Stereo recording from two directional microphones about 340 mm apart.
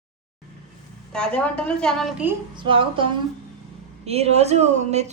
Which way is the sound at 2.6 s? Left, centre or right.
Centre.